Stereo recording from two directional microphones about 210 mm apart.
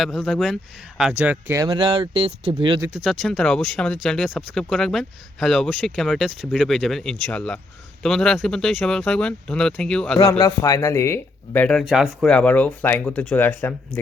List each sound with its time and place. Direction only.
0.0 s speech: centre (ahead or behind); by 2.9 s 20° right (ahead or behind)
2.9 s speech: centre (ahead or behind)
10.2 s speech: 15° left (ahead or behind)